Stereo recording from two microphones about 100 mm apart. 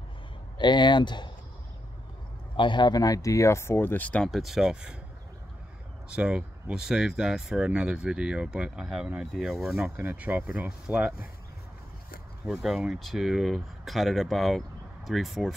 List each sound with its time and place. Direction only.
0.6 s speech: 50° left (ahead or behind)
2.5 s speech: 55° left (ahead or behind); by 4.3 s 15° left (ahead or behind)
4.3 s speech: centre (ahead or behind)
6.0 s speech: 10° right (ahead or behind)
9.8 s speech: 15° right (ahead or behind)
12.4 s speech: 5° right (ahead or behind)